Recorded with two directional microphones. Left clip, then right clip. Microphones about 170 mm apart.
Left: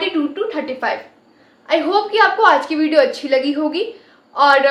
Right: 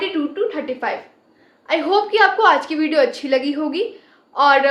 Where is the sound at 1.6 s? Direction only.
25° right (ahead or behind).